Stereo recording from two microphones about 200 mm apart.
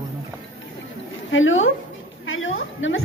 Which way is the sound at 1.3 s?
75° left (ahead or behind).